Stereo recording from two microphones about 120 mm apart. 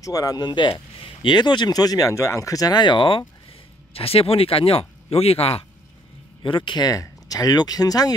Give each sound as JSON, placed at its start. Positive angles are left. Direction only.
{"t": 0.0, "sound": "speech", "side_deg": 30}
{"t": 3.9, "sound": "speech", "side_deg": 55}
{"t": 6.4, "sound": "speech", "side_deg": 40}